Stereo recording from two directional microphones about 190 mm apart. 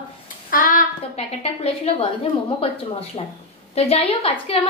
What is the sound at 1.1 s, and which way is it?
A woman's voice, 30° left (ahead or behind).